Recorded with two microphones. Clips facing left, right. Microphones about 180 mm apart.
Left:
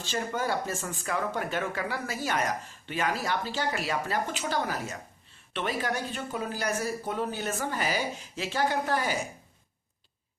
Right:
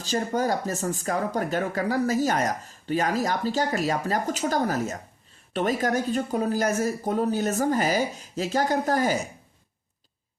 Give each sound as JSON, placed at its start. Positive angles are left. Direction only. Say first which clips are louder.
{"t": 0.0, "sound": "speech", "louder": "right 6 dB", "side_deg": -40}